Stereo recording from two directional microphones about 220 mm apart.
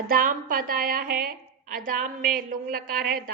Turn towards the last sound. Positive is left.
turn(degrees=-40)  # may be behind; listen again after turning